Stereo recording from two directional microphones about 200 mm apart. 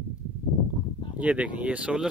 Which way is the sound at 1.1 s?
5° right (ahead or behind).